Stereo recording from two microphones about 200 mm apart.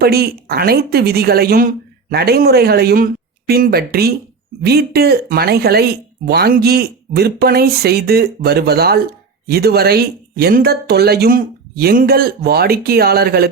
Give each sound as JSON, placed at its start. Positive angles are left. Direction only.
{"t": 0.0, "sound": "speech", "side_deg": -50}